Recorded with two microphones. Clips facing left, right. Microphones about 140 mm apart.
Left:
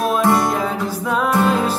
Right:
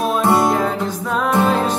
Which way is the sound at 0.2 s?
20° right (ahead or behind).